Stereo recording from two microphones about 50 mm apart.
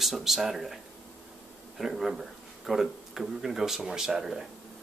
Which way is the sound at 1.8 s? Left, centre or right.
Centre.